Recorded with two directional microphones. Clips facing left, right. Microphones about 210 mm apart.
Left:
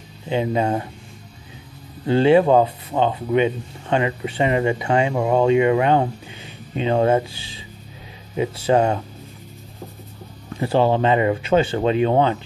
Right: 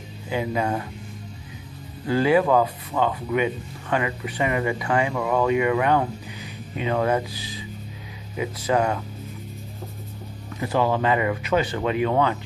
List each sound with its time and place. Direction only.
0.3 s speech: 25° left (ahead or behind)
2.0 s speech: 25° left (ahead or behind)
10.6 s speech: 30° left (ahead or behind)